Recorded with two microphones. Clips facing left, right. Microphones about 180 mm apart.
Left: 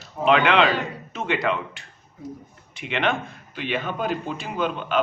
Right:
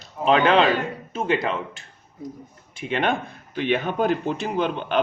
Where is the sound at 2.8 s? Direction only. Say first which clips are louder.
Right 1 dB; 45° right (ahead or behind).